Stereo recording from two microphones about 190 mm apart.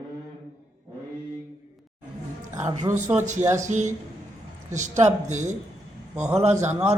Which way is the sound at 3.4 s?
15° right (ahead or behind).